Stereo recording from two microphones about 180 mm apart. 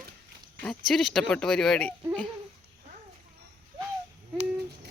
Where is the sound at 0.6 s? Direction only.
5° left (ahead or behind).